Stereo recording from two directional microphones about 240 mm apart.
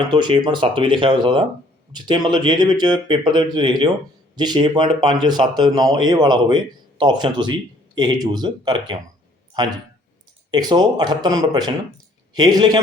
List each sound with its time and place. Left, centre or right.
0.1 s speech: centre